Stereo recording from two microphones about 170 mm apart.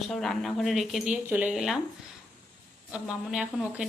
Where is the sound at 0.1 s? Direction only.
Centre (ahead or behind).